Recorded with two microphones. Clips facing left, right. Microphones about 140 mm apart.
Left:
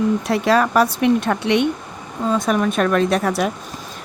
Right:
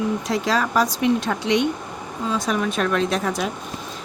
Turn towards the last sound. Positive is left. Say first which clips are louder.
# left 4 dB
turn(degrees=60)  # may be behind; listen again after turning